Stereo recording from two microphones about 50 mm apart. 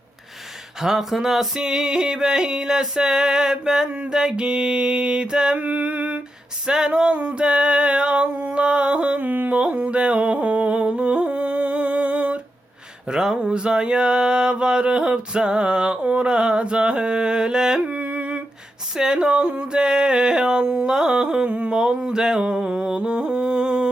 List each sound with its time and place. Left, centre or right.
0.8 s mantra: centre
3.8 s male singing: right
4.1 s mantra: centre
5.5 s music: right
6.7 s male singing: centre
9.2 s a sound: right
9.5 s humming: right
13.1 s mantra: centre
17.8 s a sound: right
18.9 s mantra: centre
21.7 s music: centre